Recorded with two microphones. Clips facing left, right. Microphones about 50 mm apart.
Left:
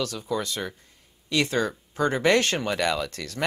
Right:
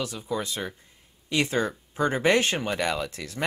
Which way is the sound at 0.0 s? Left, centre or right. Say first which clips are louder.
Left 2 dB; centre.